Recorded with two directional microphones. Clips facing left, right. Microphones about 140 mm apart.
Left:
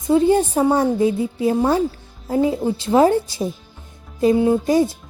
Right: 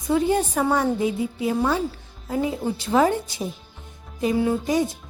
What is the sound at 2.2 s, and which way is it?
A woman's voice, 30° left (ahead or behind).